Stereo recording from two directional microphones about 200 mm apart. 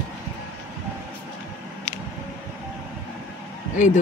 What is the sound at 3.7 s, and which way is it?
Speech, 40° left (ahead or behind).